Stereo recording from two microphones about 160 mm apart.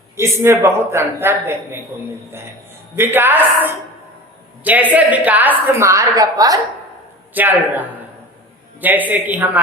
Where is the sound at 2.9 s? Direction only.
15° right (ahead or behind).